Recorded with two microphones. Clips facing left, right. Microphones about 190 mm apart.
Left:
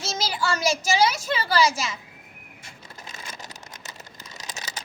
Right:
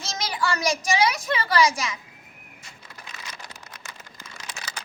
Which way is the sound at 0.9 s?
30° left (ahead or behind).